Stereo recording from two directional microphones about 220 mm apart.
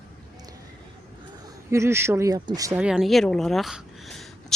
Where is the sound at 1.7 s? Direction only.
10° right (ahead or behind).